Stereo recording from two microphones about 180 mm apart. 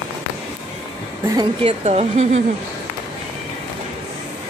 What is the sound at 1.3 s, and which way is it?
A woman's voice, 25° right (ahead or behind).